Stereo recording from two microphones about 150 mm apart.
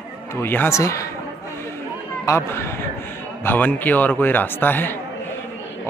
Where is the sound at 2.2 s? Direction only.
20° left (ahead or behind).